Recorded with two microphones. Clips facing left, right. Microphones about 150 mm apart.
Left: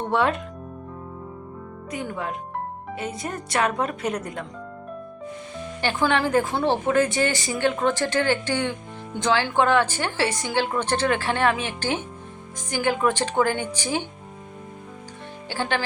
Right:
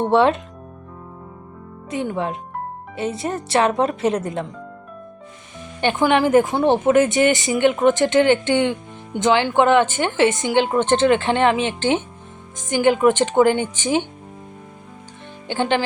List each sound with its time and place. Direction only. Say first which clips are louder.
0.0 s speech: right 7 dB; 25° right (ahead or behind)
1.9 s speech: right 6 dB; 25° right (ahead or behind)
5.8 s speech: right 6 dB; 20° right (ahead or behind)
15.4 s speech: right 6 dB; 20° right (ahead or behind)